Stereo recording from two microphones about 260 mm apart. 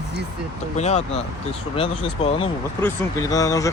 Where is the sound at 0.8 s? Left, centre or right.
Left.